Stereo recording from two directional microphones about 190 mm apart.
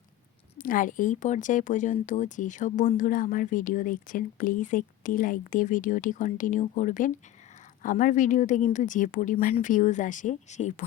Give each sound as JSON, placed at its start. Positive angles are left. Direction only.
{"t": 0.6, "sound": "speech", "side_deg": 45}